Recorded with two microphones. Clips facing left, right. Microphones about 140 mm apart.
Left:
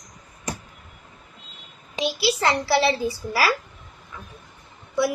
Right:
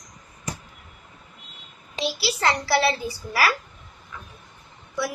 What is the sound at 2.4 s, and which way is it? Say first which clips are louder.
A woman's voice: even; 25° left (ahead or behind).